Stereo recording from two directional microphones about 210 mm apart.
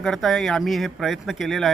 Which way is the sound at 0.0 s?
Centre (ahead or behind).